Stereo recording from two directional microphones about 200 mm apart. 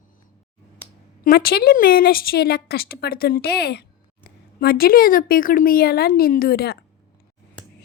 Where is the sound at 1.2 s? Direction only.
50° left (ahead or behind).